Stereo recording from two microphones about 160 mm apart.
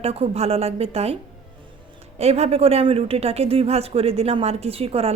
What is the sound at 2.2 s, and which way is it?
Speech, 40° right (ahead or behind).